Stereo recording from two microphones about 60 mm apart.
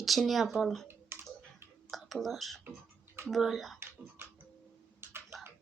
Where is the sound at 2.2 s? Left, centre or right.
Centre.